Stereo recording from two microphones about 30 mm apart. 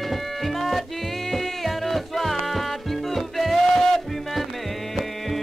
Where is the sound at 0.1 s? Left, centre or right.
Centre.